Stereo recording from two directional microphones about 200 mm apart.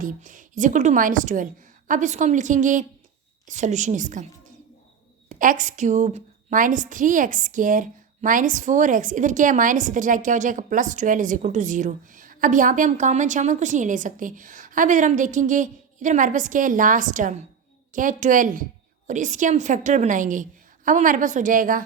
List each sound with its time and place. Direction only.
0.0 s a woman's voice: 40° right (ahead or behind)
5.3 s a woman's voice: 40° right (ahead or behind)